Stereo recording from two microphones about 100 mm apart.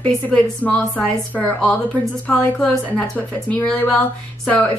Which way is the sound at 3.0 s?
15° left (ahead or behind).